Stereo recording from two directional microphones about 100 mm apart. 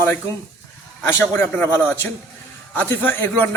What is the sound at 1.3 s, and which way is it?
Speech, 20° left (ahead or behind).